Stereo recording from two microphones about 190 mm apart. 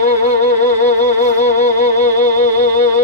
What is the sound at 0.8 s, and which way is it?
Music, 40° left (ahead or behind).